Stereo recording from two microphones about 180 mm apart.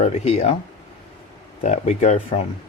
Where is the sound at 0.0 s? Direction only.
35° left (ahead or behind).